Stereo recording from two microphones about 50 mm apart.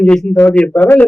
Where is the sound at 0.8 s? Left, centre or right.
Left.